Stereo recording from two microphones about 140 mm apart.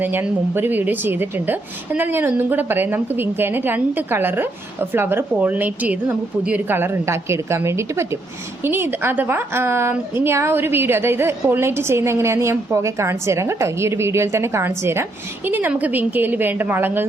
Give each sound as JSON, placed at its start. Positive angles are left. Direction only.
{"t": 0.0, "sound": "a woman's voice", "side_deg": -15}